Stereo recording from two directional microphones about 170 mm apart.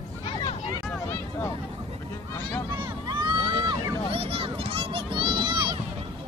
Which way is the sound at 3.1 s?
25° right (ahead or behind).